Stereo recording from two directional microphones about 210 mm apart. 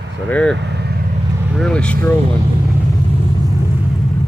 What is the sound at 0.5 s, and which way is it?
Speech, 55° right (ahead or behind).